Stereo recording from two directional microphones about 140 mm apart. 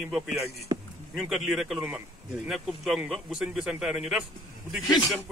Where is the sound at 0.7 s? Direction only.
25° right (ahead or behind).